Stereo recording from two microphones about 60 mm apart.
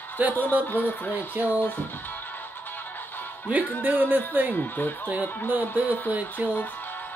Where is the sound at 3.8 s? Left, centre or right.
Right.